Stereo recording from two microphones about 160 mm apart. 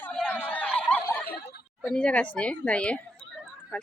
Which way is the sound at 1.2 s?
80° left.